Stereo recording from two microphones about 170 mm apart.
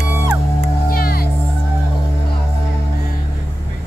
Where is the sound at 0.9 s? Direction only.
60° left (ahead or behind).